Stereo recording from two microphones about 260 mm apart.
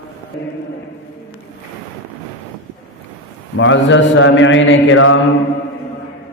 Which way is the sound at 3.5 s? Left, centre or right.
Left.